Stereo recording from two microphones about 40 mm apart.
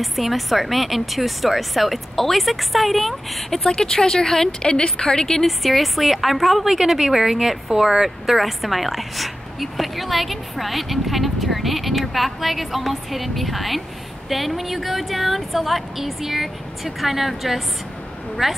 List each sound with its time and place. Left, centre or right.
0.0 s a woman's voice: centre
3.7 s a woman's voice: centre
5.4 s a woman's voice: centre